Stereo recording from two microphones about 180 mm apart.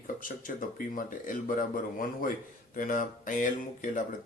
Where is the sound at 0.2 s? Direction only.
50° left (ahead or behind).